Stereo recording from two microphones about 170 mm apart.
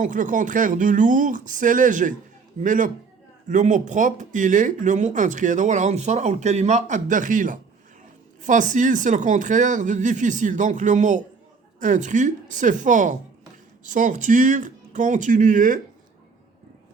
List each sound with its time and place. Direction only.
0.0 s speech: 50° right (ahead or behind)